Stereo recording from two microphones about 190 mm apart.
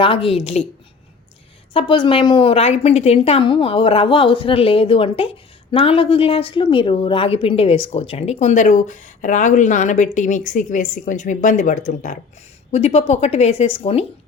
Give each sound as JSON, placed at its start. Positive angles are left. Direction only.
{"t": 0.0, "sound": "speech", "side_deg": 30}
{"t": 1.7, "sound": "a woman's voice", "side_deg": 25}